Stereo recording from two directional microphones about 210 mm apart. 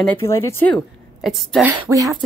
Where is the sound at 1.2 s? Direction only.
Centre (ahead or behind).